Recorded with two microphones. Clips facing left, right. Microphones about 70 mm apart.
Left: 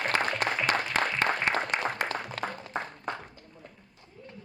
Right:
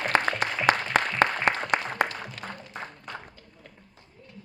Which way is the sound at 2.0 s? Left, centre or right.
Left.